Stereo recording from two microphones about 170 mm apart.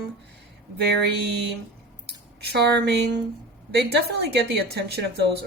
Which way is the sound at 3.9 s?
70° right (ahead or behind).